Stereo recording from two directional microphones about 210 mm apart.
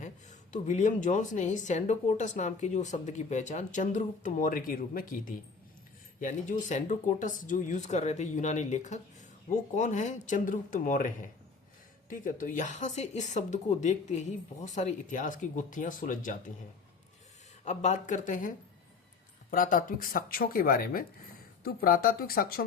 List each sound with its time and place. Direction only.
0.0 s speech: 35° left (ahead or behind)
17.7 s speech: 35° left (ahead or behind)